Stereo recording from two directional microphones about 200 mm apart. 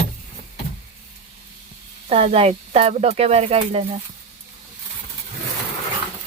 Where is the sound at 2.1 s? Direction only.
30° right (ahead or behind).